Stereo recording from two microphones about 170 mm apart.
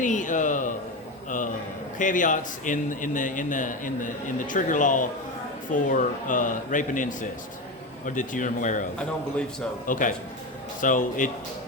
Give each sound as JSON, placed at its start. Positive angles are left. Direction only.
{"t": 0.0, "sound": "a man's voice", "side_deg": 50}
{"t": 2.0, "sound": "a man's voice", "side_deg": 50}